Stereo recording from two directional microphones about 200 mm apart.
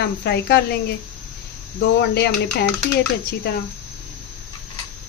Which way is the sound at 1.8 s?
55° left (ahead or behind).